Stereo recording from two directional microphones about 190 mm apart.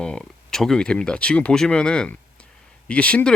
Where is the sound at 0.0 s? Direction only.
5° left (ahead or behind).